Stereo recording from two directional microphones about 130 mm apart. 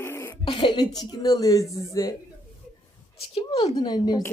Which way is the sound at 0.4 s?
40° left (ahead or behind).